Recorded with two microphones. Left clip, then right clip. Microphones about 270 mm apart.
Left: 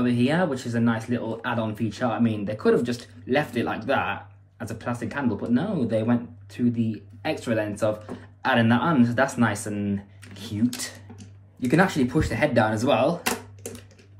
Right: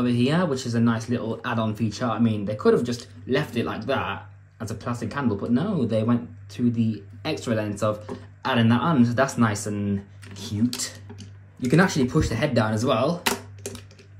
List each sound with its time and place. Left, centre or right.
0.0 s speech: right
10.8 s a sound: right
12.4 s speech: centre